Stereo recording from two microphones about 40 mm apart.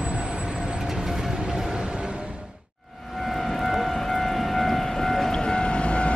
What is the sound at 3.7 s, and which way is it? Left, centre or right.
Siren, centre.